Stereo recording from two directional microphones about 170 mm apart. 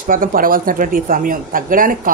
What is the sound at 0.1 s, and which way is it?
Speech, 55° right (ahead or behind).